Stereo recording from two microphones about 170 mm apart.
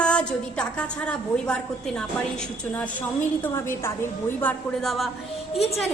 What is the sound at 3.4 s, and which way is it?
A woman's voice, 15° left (ahead or behind).